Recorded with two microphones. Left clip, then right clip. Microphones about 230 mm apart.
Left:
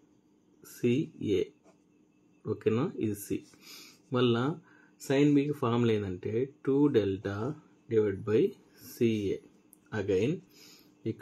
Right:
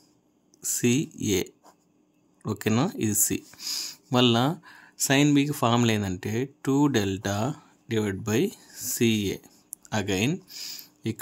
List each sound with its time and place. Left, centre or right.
0.7 s speech: right